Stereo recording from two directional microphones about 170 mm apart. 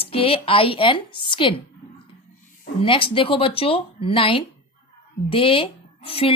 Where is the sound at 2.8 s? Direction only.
30° left (ahead or behind).